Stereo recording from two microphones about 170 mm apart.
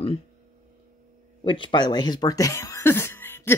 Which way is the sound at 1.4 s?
30° left (ahead or behind).